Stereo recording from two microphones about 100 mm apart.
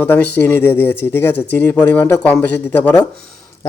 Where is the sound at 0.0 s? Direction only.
20° left (ahead or behind).